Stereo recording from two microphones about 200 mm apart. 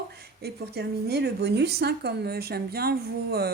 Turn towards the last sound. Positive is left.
turn(degrees=-50)  # may be behind; listen again after turning